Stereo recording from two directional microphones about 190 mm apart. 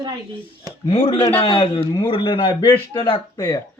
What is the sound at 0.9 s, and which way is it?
A man's voice, 30° left (ahead or behind).